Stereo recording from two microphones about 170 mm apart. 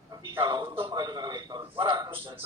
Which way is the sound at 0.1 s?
25° right (ahead or behind).